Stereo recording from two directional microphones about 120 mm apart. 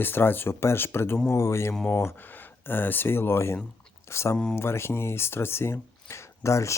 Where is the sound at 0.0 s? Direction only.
15° left (ahead or behind).